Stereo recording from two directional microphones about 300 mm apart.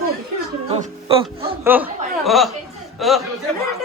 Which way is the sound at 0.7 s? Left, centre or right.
Centre.